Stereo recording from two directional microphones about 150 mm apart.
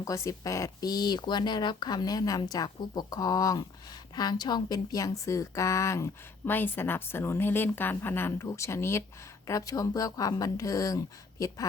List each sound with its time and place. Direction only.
0.0 s speech: 20° left (ahead or behind)